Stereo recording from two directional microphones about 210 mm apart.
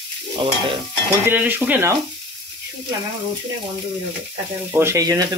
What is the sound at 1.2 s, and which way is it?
Stir, 10° right (ahead or behind).